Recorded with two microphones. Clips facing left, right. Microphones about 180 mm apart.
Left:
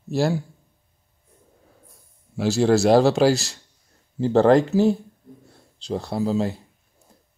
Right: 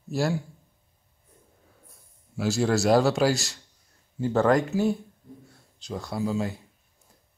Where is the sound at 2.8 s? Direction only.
30° left (ahead or behind).